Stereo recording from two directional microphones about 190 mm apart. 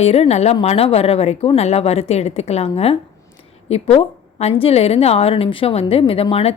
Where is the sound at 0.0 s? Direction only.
35° left (ahead or behind).